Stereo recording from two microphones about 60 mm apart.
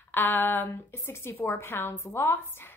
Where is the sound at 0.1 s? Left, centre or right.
Left.